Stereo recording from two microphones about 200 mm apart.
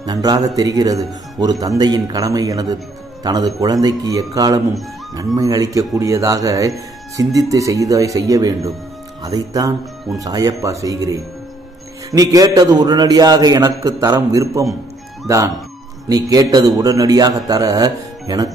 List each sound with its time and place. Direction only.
0.0 s a man's voice: 20° right (ahead or behind)